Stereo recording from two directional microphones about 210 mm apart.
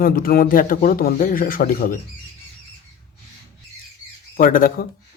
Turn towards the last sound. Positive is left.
turn(degrees=45)  # may be behind; listen again after turning